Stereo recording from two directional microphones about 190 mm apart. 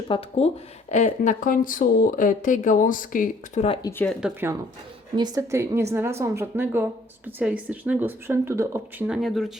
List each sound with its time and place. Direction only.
0.1 s speech: 30° left (ahead or behind)
3.8 s speech: 10° left (ahead or behind)
4.2 s speech: 10° right (ahead or behind)